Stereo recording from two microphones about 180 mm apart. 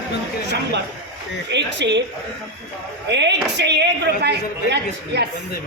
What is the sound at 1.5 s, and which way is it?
Speech, 75° right (ahead or behind).